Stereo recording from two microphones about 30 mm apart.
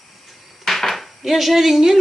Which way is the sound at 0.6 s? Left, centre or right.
Centre.